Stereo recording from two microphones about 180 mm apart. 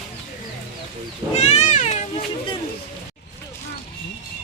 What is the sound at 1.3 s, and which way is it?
Cat, 35° left (ahead or behind).